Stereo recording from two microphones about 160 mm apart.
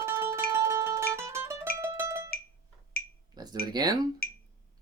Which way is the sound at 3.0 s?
75° left (ahead or behind).